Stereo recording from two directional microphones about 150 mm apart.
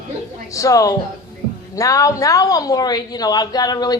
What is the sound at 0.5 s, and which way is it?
A woman's voice, 20° left (ahead or behind).